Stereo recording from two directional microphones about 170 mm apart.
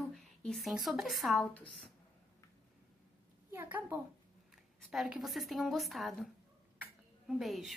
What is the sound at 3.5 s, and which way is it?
Speech, 10° right (ahead or behind).